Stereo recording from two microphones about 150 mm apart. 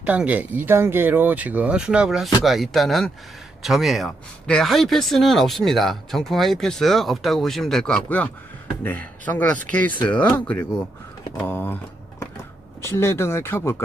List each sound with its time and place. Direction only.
0.0 s speech: 10° right (ahead or behind); by 11.8 s 15° left (ahead or behind)
12.8 s speech: 15° left (ahead or behind)